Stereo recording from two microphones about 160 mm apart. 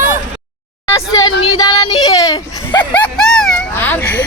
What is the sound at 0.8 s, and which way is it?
Speech, 20° left (ahead or behind).